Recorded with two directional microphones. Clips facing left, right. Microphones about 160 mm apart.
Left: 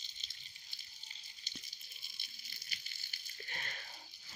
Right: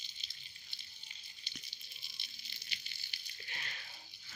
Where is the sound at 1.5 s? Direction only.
45° left (ahead or behind).